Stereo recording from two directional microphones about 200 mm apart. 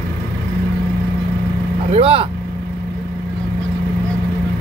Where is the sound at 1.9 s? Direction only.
30° right (ahead or behind).